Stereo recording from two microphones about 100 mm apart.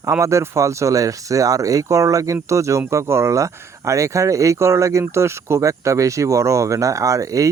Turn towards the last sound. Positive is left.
turn(degrees=-35)  # may be behind; listen again after turning